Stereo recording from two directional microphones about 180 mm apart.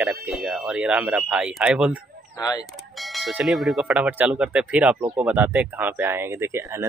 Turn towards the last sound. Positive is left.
turn(degrees=-15)  # may be behind; listen again after turning